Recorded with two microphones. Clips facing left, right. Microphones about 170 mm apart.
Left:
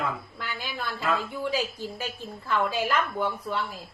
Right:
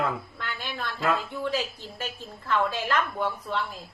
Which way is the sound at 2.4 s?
10° left (ahead or behind).